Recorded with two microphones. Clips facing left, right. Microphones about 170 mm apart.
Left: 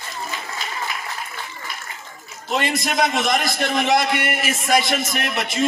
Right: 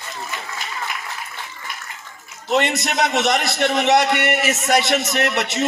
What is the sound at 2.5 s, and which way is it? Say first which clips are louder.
A man's voice: right 3 dB; 70° right (ahead or behind).